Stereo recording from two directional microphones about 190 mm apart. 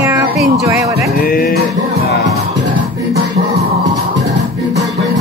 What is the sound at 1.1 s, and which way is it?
Music, 50° left (ahead or behind).